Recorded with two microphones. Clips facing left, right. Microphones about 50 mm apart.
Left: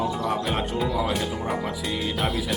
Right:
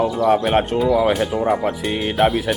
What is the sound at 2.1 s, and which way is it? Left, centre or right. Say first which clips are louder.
Speech: right 12 dB; right.